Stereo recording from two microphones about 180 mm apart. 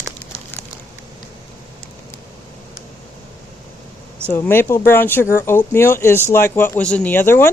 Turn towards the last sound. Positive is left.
turn(degrees=15)  # may be behind; listen again after turning